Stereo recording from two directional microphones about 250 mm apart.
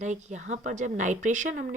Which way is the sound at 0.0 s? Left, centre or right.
Right.